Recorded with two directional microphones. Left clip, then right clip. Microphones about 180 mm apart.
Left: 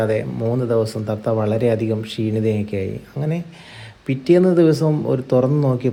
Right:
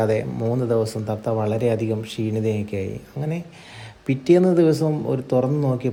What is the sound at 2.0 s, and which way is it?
Speech, 30° right (ahead or behind).